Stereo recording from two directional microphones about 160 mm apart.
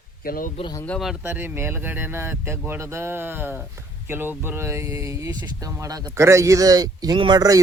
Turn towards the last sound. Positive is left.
turn(degrees=-25)  # may be behind; listen again after turning